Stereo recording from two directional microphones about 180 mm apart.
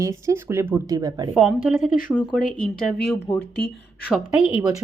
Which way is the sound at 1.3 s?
Centre (ahead or behind).